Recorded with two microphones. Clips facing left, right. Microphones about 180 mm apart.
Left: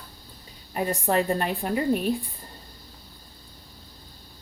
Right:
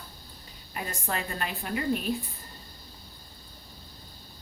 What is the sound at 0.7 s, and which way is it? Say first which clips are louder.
A woman's voice: left 10 dB; 35° left (ahead or behind).